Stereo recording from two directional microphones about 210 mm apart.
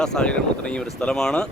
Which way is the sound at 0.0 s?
5° left (ahead or behind).